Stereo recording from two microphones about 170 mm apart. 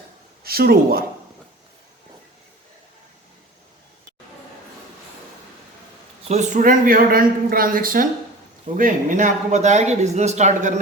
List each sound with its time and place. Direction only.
0.4 s speech: 65° right (ahead or behind)
6.2 s a man's voice: 40° right (ahead or behind)